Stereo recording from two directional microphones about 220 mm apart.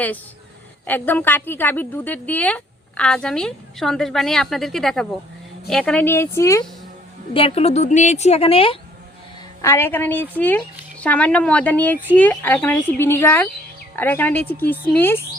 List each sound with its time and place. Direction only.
0.9 s a woman's voice: 10° left (ahead or behind)
7.3 s a woman's voice: 25° left (ahead or behind)
9.6 s a woman's voice: 10° left (ahead or behind)